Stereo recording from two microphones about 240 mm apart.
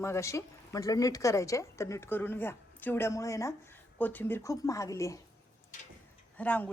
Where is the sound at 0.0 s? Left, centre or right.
Centre.